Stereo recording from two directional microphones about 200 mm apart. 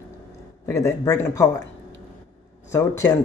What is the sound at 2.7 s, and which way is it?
Speech, 15° left (ahead or behind).